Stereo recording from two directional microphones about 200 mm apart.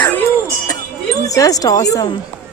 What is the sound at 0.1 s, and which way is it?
Music, 10° left (ahead or behind).